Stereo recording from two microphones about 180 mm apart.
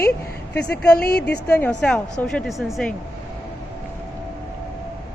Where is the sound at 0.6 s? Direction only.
60° left (ahead or behind).